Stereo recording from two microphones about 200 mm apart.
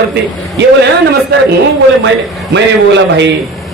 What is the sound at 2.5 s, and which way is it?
Speech, 60° right (ahead or behind).